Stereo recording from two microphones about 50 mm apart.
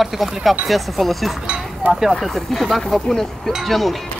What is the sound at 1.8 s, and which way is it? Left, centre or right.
Speech, right.